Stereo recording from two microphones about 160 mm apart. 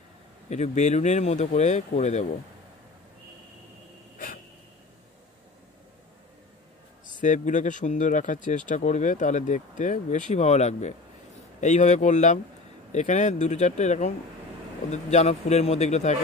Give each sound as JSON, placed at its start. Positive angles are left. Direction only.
{"t": 0.5, "sound": "speech", "side_deg": 45}
{"t": 7.2, "sound": "speech", "side_deg": 50}